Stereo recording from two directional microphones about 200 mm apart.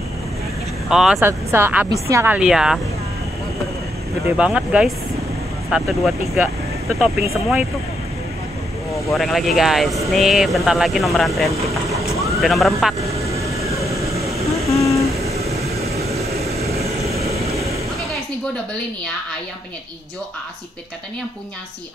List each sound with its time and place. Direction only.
0.8 s speech: centre (ahead or behind)
4.4 s speech: 5° right (ahead or behind)
9.1 s speech: centre (ahead or behind)
11.9 s vehicle: 15° right (ahead or behind)
12.4 s speech: centre (ahead or behind)
13.5 s vehicle: 30° right (ahead or behind)